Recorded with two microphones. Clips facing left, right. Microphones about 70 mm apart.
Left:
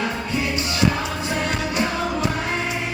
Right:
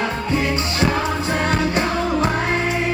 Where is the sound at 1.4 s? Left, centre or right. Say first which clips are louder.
Right 5 dB; right.